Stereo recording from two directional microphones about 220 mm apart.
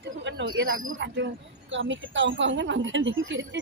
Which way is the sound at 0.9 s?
55° right (ahead or behind).